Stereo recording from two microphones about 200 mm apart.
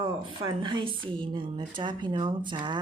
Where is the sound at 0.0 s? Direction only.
25° right (ahead or behind).